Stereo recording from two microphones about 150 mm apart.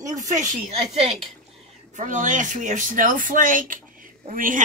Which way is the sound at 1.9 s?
55° right (ahead or behind).